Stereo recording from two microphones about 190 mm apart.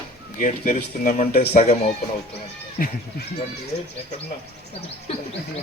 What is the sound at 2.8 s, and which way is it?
Speech, 50° left (ahead or behind).